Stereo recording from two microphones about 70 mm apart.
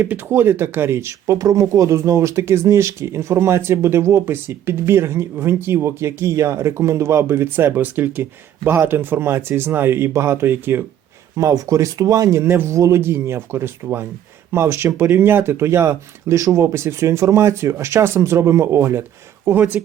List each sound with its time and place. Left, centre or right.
0.0 s speech: right
1.4 s speech: right
11.3 s speech: right
12.5 s speech: right
12.7 s speech: right
13.0 s speech: right
19.5 s speech: right